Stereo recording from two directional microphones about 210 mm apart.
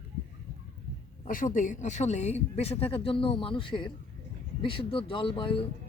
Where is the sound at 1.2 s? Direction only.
40° left (ahead or behind).